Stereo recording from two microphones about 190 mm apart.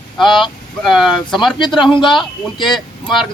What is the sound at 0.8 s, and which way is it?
Speech, centre (ahead or behind).